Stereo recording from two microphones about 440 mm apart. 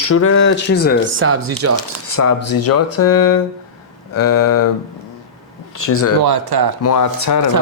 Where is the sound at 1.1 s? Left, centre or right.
Right.